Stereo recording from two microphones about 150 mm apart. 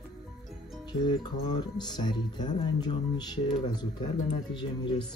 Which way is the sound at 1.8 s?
30° left (ahead or behind).